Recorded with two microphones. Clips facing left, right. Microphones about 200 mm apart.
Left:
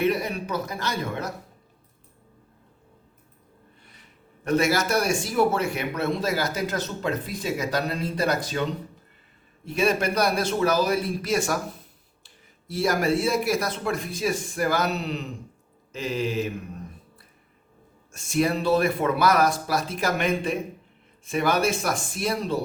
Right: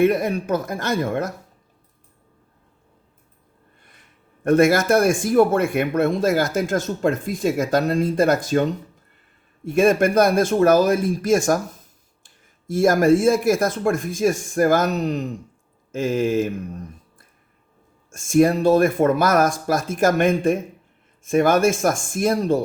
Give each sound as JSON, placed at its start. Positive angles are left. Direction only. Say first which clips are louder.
{"t": 0.0, "sound": "speech", "louder": "right 6 dB", "side_deg": -50}
{"t": 4.4, "sound": "speech", "louder": "right 7 dB", "side_deg": -50}
{"t": 18.1, "sound": "speech", "louder": "right 8 dB", "side_deg": -50}